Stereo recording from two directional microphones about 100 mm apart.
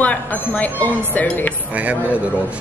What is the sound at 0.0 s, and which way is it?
A woman's voice, 15° left (ahead or behind).